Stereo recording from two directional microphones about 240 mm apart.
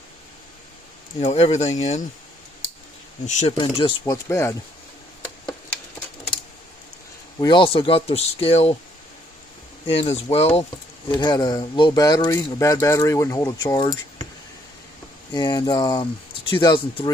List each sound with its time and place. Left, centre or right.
1.2 s speech: left
3.2 s speech: left
7.3 s speech: centre
9.8 s speech: left
15.3 s speech: centre